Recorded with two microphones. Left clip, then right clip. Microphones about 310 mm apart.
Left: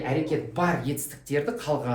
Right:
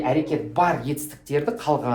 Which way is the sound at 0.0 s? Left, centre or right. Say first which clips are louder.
Right 4 dB; centre.